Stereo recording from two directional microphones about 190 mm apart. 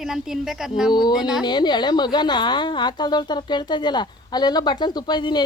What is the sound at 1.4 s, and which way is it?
A woman's voice, 25° left (ahead or behind).